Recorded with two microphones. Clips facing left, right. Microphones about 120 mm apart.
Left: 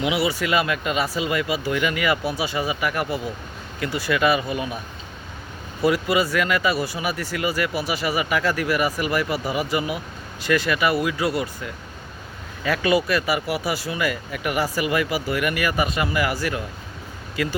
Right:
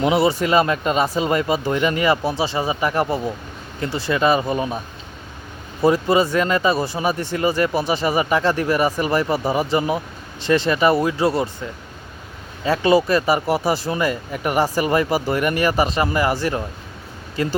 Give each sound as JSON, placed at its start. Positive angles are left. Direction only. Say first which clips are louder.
{"t": 0.0, "sound": "speech", "louder": "right 5 dB", "side_deg": -40}
{"t": 5.8, "sound": "speech", "louder": "right 4 dB", "side_deg": -35}